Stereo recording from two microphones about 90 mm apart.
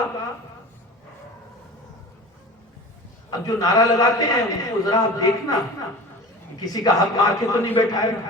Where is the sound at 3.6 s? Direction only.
40° left (ahead or behind).